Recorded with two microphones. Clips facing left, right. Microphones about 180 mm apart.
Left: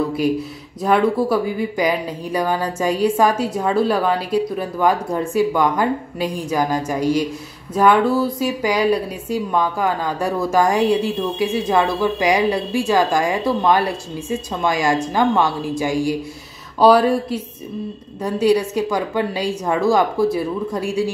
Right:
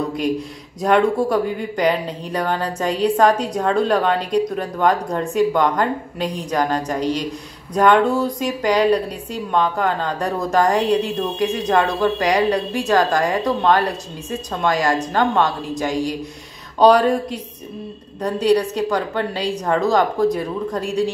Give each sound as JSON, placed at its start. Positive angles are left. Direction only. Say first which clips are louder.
{"t": 0.8, "sound": "speech", "louder": "even", "side_deg": 5}